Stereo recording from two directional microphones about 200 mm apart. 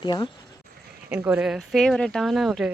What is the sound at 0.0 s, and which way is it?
Speech, 20° left (ahead or behind).